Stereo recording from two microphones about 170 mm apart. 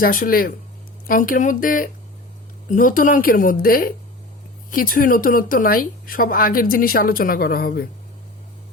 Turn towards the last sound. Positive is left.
turn(degrees=65)  # may be behind; listen again after turning